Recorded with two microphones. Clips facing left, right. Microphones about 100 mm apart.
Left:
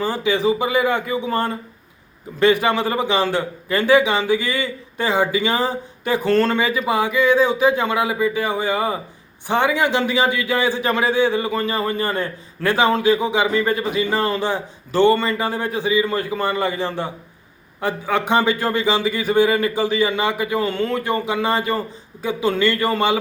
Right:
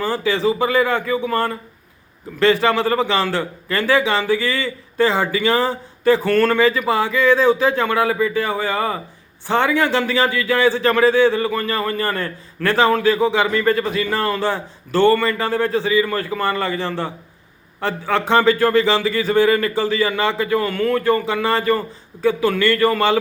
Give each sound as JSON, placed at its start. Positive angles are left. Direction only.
{"t": 0.0, "sound": "a man's voice", "side_deg": 15}